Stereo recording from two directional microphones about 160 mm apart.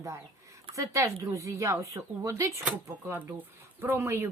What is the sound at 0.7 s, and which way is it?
Speech, 20° right (ahead or behind).